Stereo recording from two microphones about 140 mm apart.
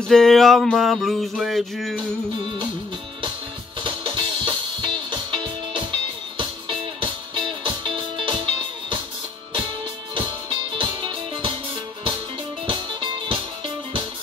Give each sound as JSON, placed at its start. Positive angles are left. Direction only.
{"t": 0.0, "sound": "a sound", "side_deg": 5}
{"t": 3.8, "sound": "music", "side_deg": -35}
{"t": 10.8, "sound": "music", "side_deg": -35}
{"t": 12.6, "sound": "music", "side_deg": -40}